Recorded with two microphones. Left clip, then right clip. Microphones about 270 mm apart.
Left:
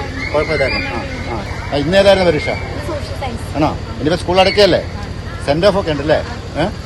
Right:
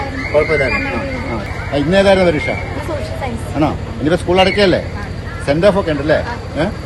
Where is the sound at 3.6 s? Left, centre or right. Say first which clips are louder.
Even; left.